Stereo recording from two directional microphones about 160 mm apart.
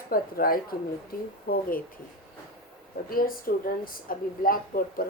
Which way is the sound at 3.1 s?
65° left (ahead or behind).